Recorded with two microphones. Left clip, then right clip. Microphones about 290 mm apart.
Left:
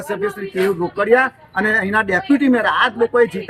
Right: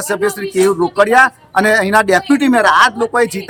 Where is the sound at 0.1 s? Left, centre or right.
Centre.